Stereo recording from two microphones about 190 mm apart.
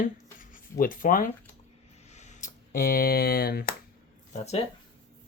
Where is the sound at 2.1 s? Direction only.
35° left (ahead or behind); by 3.6 s 55° left (ahead or behind).